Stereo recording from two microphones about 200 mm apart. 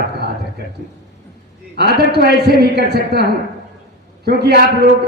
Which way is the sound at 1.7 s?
55° right (ahead or behind).